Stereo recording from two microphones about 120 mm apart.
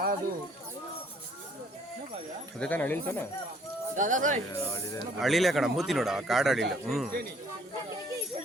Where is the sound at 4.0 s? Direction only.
90° right.